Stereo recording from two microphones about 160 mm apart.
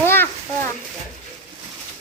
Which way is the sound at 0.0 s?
15° left (ahead or behind).